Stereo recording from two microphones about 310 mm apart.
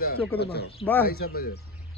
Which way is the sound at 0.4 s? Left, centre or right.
Left.